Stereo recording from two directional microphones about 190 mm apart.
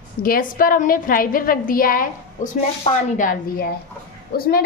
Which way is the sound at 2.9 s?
30° left (ahead or behind).